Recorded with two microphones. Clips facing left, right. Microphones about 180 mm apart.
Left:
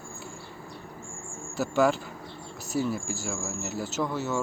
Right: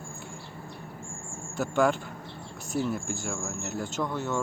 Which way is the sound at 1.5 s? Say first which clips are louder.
Left 1 dB; 5° left (ahead or behind).